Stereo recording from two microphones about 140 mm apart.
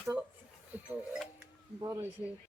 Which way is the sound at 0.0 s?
10° right (ahead or behind).